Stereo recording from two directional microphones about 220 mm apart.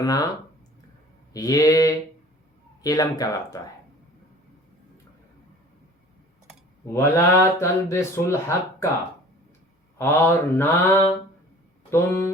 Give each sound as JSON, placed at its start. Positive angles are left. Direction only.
{"t": 0.0, "sound": "speech", "side_deg": 15}
{"t": 1.3, "sound": "speech", "side_deg": 15}
{"t": 6.8, "sound": "speech", "side_deg": 10}
{"t": 10.0, "sound": "speech", "side_deg": 10}
{"t": 11.9, "sound": "speech", "side_deg": 10}